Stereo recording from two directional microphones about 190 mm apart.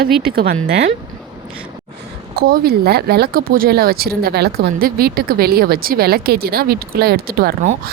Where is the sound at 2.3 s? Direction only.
55° right (ahead or behind).